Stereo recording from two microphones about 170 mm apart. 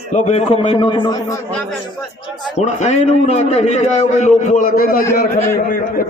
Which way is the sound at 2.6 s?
40° left (ahead or behind).